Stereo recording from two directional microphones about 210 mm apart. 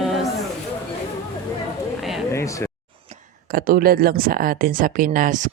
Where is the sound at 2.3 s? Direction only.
15° left (ahead or behind).